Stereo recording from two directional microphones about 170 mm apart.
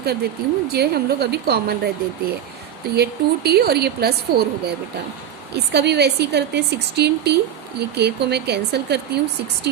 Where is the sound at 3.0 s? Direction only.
70° right (ahead or behind).